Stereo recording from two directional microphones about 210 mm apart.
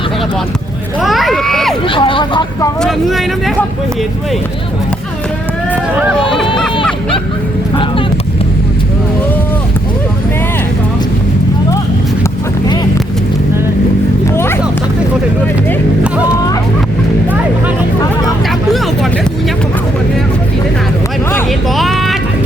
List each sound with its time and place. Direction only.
1.0 s speech: centre (ahead or behind)
1.9 s speech: 25° left (ahead or behind)
2.8 s speech: centre (ahead or behind)
14.3 s music: 10° left (ahead or behind)
21.8 s vehicle: centre (ahead or behind)